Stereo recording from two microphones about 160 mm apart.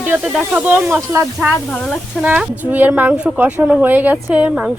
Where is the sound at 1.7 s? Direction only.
5° left (ahead or behind).